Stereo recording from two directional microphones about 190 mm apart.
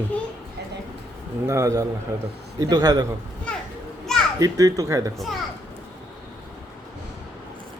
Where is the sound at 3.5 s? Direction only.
5° left (ahead or behind).